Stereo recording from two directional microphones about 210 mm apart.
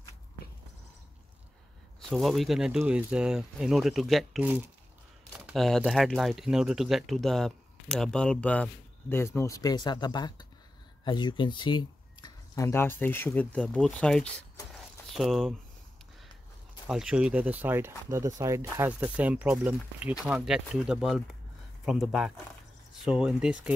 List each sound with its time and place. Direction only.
2.0 s speech: centre (ahead or behind)
16.8 s speech: centre (ahead or behind)